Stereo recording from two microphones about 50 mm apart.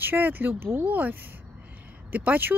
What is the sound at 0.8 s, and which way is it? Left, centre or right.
Speech, right.